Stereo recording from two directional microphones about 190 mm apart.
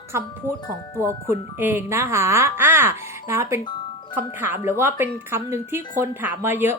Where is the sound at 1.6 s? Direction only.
10° right (ahead or behind).